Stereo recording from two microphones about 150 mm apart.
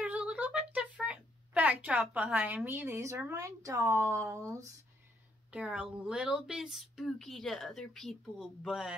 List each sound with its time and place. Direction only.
0.0 s a sound: 10° right (ahead or behind)
4.1 s speech: 20° right (ahead or behind)
5.5 s speech: 5° right (ahead or behind)